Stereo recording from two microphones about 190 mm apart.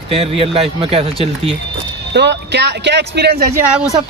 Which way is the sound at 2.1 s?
65° right (ahead or behind).